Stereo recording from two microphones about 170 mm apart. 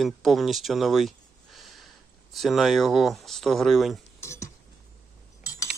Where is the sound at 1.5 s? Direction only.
Centre (ahead or behind).